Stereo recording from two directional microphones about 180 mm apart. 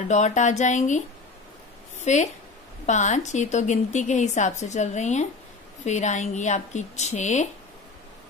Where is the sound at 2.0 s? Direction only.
40° left (ahead or behind).